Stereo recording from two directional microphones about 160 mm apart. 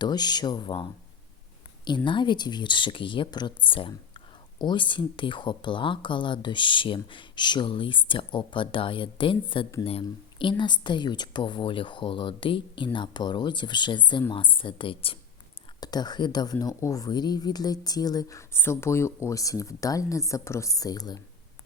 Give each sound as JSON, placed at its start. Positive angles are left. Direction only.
{"t": 0.0, "sound": "speech", "side_deg": 25}
{"t": 2.0, "sound": "speech", "side_deg": 30}